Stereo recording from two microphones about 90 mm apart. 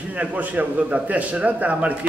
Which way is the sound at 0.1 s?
15° right (ahead or behind).